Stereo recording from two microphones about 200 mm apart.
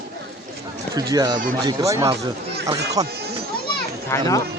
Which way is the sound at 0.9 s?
20° right (ahead or behind).